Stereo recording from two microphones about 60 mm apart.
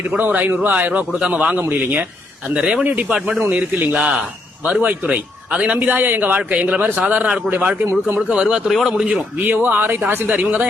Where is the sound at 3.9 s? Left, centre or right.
Centre.